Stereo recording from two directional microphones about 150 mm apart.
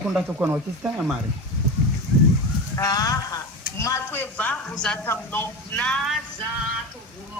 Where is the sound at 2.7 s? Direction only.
25° left (ahead or behind); by 6.2 s 5° left (ahead or behind).